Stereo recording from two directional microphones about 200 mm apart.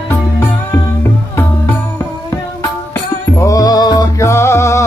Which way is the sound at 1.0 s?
10° left (ahead or behind).